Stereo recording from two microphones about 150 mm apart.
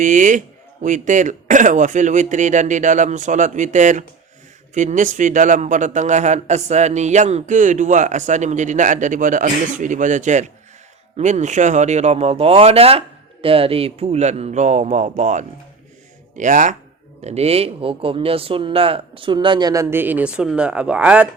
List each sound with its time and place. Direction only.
0.0 s a man's voice: 60° right (ahead or behind)
17.2 s speech: 45° right (ahead or behind); by 21.2 s 5° right (ahead or behind)